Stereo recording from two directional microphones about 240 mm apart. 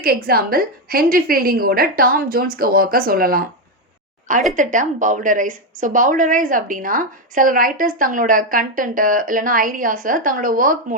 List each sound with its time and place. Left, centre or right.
0.0 s a woman's voice: right
4.5 s a woman's voice: right